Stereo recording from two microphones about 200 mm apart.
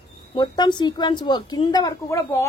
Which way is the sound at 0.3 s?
20° left (ahead or behind).